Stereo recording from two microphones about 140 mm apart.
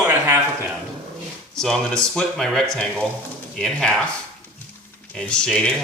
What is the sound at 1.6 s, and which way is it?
Speech, 5° left (ahead or behind).